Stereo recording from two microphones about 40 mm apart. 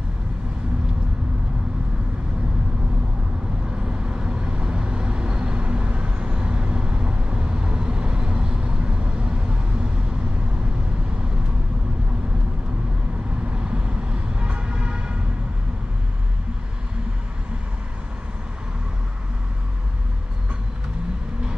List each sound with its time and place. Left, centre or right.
3.7 s vehicle: centre
13.5 s vehicle: right